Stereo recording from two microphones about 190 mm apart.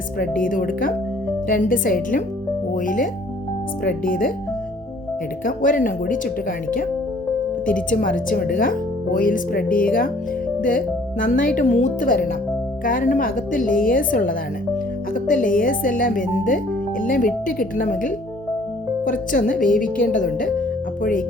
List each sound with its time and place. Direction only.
0.2 s speech: 45° left (ahead or behind)
5.5 s speech: 45° left (ahead or behind)
7.9 s speech: 45° left (ahead or behind)